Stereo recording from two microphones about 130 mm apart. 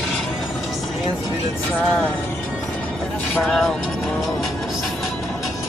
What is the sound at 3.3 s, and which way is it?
Speech, 5° left (ahead or behind).